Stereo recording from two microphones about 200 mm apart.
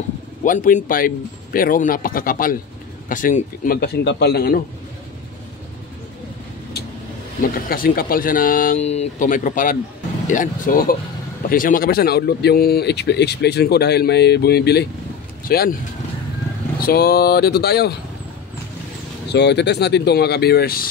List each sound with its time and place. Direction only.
0.4 s speech: 40° left (ahead or behind)
7.7 s speech: 45° left (ahead or behind)
16.8 s speech: 50° left (ahead or behind)
19.2 s speech: 55° left (ahead or behind)